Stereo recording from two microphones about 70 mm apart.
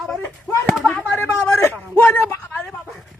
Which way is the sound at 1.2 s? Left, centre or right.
Left.